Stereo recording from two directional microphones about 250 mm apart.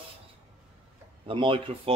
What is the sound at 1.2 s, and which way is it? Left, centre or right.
Speech, right.